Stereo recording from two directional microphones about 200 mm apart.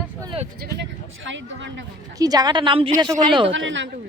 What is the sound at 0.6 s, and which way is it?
Speech, 65° right (ahead or behind).